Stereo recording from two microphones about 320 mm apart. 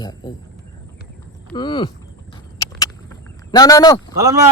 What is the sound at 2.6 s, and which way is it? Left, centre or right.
Vehicle, centre.